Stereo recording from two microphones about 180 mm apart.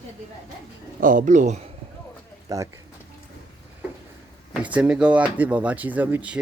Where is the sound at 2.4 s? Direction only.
15° right (ahead or behind).